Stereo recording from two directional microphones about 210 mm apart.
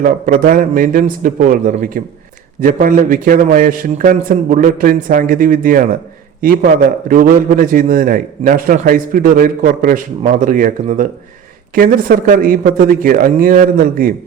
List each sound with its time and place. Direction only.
0.0 s a man's voice: 40° right (ahead or behind)